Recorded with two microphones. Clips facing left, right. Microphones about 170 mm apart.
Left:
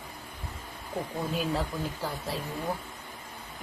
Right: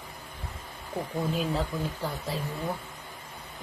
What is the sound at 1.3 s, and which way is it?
Speech, centre (ahead or behind).